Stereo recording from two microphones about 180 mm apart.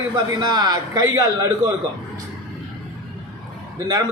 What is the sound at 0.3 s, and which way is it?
A man's voice, 20° right (ahead or behind).